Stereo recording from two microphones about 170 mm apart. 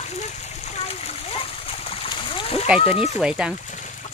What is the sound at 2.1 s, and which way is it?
Splash, 30° left (ahead or behind).